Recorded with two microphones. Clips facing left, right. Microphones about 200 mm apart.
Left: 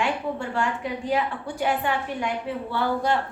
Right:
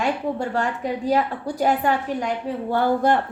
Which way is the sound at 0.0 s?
40° right (ahead or behind).